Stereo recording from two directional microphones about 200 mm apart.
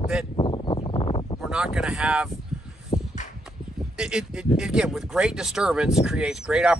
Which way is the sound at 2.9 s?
20° left (ahead or behind).